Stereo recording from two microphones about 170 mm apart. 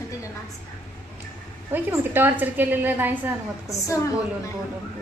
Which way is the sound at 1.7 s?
10° right (ahead or behind).